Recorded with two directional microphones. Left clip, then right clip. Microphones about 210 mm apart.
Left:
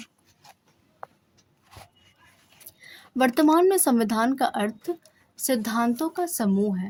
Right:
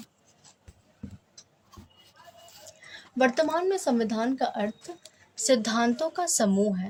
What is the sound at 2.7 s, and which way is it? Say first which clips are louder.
Speech: left 1 dB; 35° left (ahead or behind).